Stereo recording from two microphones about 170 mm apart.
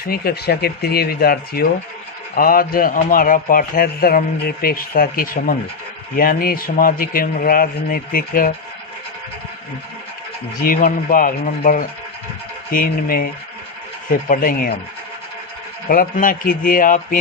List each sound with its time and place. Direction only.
0.0 s a man's voice: 65° left (ahead or behind)
10.6 s a man's voice: 55° left (ahead or behind)
15.9 s a man's voice: 55° left (ahead or behind)